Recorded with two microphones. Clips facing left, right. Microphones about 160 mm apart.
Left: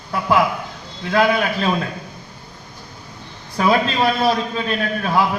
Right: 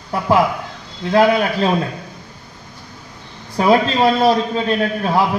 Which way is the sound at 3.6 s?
25° right (ahead or behind).